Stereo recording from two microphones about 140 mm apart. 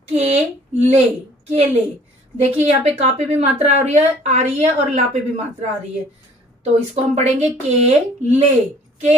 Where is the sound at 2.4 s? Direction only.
50° right (ahead or behind).